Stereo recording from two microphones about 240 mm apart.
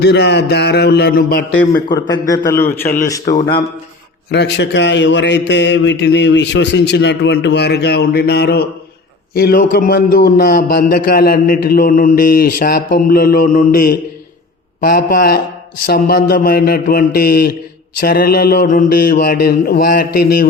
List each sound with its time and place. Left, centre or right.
0.0 s a man's voice: left
1.9 s a man's voice: centre
3.2 s a man's voice: left
4.3 s a man's voice: left